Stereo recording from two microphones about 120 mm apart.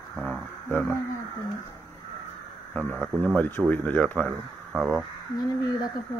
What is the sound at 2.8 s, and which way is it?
Speech, 5° right (ahead or behind).